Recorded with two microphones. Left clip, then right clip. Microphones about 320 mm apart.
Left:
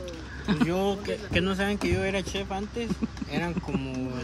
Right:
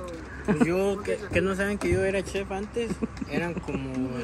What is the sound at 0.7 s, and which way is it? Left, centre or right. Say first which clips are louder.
Speech: right 2 dB; left.